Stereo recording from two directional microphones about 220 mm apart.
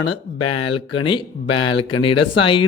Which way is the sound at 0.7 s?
20° left (ahead or behind).